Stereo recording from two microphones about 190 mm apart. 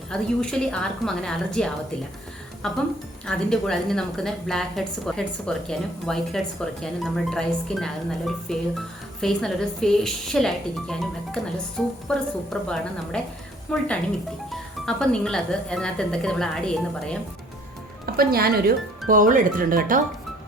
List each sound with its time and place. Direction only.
0.1 s a woman's voice: 5° left (ahead or behind)
18.0 s speech: 55° right (ahead or behind)